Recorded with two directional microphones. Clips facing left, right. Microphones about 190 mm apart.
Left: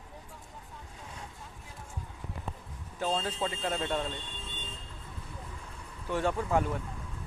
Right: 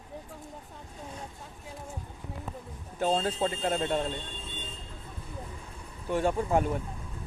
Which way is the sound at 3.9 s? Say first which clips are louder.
Right 3 dB; 25° right (ahead or behind).